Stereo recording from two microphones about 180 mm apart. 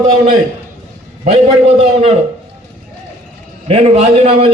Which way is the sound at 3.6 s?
35° right (ahead or behind).